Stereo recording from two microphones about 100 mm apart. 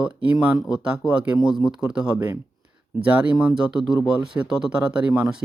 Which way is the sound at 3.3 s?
10° right (ahead or behind).